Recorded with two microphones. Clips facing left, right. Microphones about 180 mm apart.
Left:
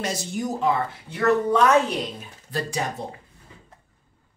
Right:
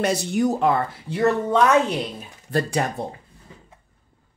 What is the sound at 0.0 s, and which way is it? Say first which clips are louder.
Speech: right 7 dB; 60° right (ahead or behind).